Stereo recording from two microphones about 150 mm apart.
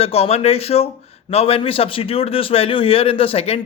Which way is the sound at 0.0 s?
40° left (ahead or behind).